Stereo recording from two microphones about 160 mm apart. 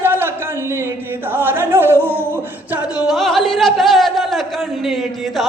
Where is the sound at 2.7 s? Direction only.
5° right (ahead or behind).